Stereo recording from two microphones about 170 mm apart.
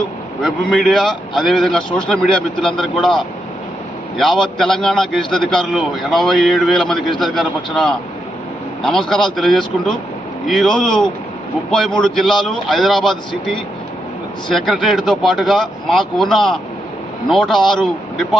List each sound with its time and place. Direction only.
0.4 s speech: centre (ahead or behind)
4.2 s speech: 5° left (ahead or behind)
14.5 s speech: centre (ahead or behind)
17.6 s a man's voice: 25° left (ahead or behind)